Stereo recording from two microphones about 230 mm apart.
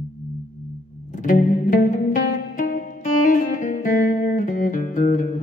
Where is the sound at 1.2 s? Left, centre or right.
Left.